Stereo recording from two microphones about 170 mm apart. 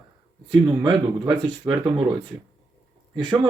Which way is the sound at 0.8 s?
25° right (ahead or behind).